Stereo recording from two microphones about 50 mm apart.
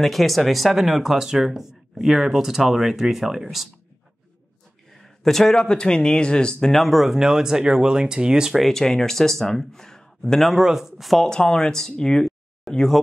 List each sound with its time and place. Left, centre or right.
0.0 s speech: centre
4.9 s speech: centre
6.7 s speech: centre
8.5 s speech: centre
10.5 s speech: centre
11.2 s speech: centre